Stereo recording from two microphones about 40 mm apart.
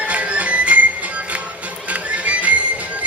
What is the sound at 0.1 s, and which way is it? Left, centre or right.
Music, right.